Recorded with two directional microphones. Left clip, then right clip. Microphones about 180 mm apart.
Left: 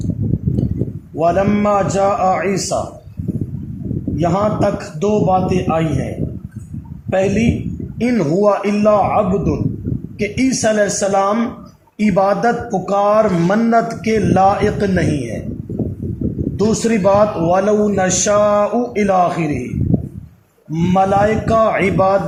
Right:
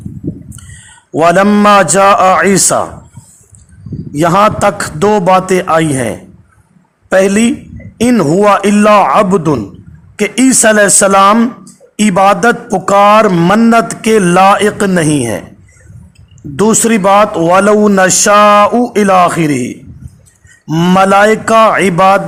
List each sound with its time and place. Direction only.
1.2 s a man's voice: 45° right (ahead or behind)
4.2 s a man's voice: 45° right (ahead or behind)
7.1 s a man's voice: 40° right (ahead or behind)
12.0 s speech: 30° right (ahead or behind)
16.6 s a man's voice: 45° right (ahead or behind)
20.7 s speech: 40° right (ahead or behind)